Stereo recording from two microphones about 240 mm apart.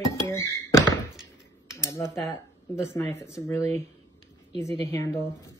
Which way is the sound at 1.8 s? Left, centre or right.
Centre.